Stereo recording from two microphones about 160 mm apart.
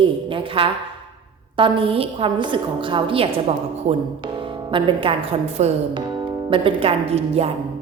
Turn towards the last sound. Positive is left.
turn(degrees=-40)  # may be behind; listen again after turning